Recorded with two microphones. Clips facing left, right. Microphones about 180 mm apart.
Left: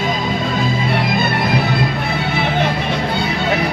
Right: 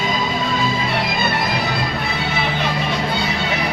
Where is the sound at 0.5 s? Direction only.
55° left (ahead or behind).